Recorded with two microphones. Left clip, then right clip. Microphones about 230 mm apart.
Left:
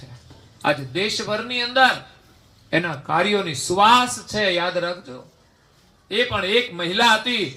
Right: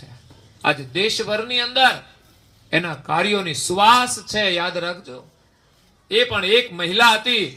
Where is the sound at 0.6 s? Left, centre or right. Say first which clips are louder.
Right 2 dB; right.